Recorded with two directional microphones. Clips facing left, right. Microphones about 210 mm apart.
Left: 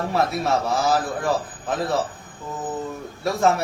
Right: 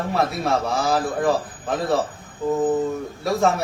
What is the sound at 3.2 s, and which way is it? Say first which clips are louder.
Speech: even; centre (ahead or behind).